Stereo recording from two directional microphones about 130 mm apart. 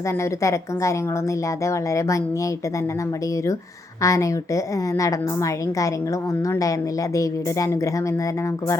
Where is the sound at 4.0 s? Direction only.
25° left (ahead or behind).